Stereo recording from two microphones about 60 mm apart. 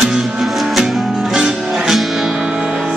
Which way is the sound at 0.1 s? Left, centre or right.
Centre.